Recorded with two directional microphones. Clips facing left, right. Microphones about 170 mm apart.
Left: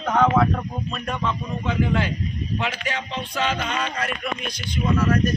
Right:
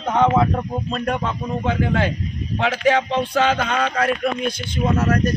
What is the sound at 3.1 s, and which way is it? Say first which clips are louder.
Speech: right 7 dB; 50° right (ahead or behind).